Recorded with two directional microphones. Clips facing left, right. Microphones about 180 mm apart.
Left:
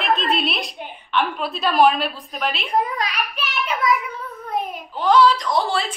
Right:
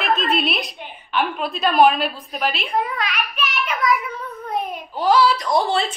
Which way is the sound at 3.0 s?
35° left (ahead or behind).